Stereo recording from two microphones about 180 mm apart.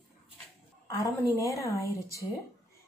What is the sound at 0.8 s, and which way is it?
A woman's voice, 15° left (ahead or behind).